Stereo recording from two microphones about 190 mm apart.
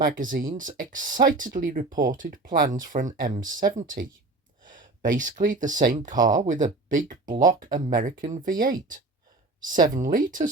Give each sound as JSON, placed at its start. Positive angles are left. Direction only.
{"t": 0.0, "sound": "speech", "side_deg": -45}